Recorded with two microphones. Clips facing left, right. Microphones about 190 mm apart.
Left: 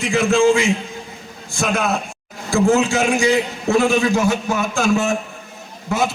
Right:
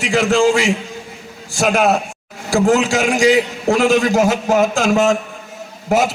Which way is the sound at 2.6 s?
90° right.